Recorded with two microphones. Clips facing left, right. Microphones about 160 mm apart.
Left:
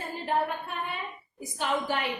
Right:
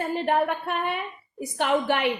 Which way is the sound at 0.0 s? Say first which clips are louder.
Right 6 dB; 70° right (ahead or behind).